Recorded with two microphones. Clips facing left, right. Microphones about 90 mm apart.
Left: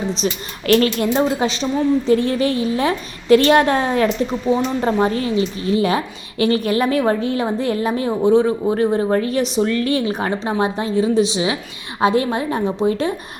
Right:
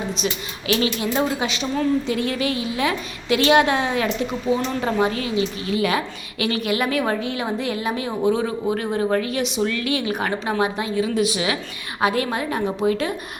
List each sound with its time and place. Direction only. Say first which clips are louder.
0.7 s a woman's voice: left 6 dB; 50° left (ahead or behind)
1.1 s a woman's voice: left 4 dB; 35° left (ahead or behind)